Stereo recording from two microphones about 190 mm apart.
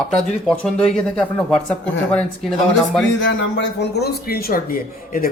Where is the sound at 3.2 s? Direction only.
65° left (ahead or behind).